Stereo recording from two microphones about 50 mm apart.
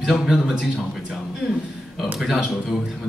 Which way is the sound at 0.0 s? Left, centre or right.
Centre.